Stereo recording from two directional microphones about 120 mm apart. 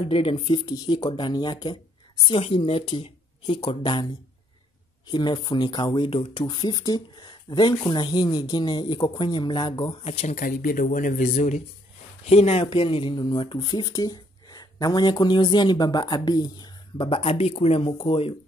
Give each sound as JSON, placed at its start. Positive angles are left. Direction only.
{"t": 0.0, "sound": "speech", "side_deg": 50}
{"t": 2.2, "sound": "speech", "side_deg": 50}
{"t": 10.9, "sound": "speech", "side_deg": 90}
{"t": 12.3, "sound": "speech", "side_deg": 60}
{"t": 12.6, "sound": "speech", "side_deg": 45}